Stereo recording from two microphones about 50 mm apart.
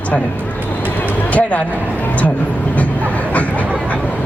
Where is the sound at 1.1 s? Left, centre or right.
Left.